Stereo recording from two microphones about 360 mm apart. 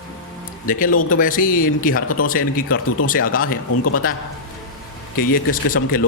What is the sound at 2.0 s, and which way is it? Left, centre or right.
Speech, left.